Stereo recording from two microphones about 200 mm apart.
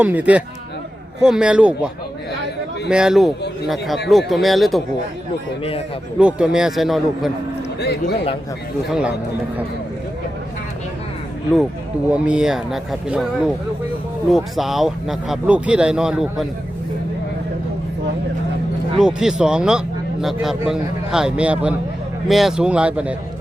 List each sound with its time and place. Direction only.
0.0 s speech: 5° right (ahead or behind)
2.9 s speech: 5° right (ahead or behind)
6.1 s speech: 5° right (ahead or behind)
7.8 s speech: 55° left (ahead or behind)
8.9 s speech: 5° right (ahead or behind)
12.1 s speech: 5° right (ahead or behind)
14.3 s speech: centre (ahead or behind)
18.9 s speech: 5° right (ahead or behind)